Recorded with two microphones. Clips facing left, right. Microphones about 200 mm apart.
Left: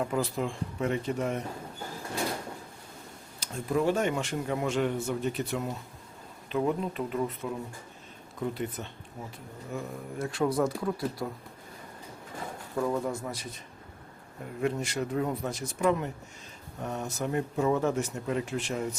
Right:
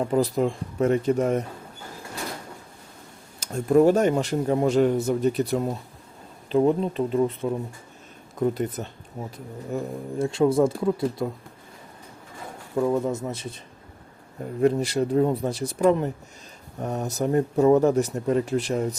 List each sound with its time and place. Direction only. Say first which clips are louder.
0.0 s speech: right 8 dB; 35° right (ahead or behind)
3.4 s speech: right 10 dB; 45° right (ahead or behind); by 7.5 s 30° right (ahead or behind)
8.4 s speech: right 8 dB; 45° right (ahead or behind)
9.7 s speech: right 8 dB; 25° right (ahead or behind)
12.7 s speech: right 6 dB; 20° right (ahead or behind)
14.6 s speech: right 9 dB; 35° right (ahead or behind)